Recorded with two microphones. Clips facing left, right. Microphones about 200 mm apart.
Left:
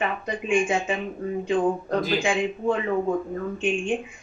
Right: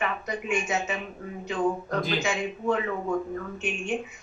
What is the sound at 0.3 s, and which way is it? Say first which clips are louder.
Speech: left 7 dB; 30° left (ahead or behind).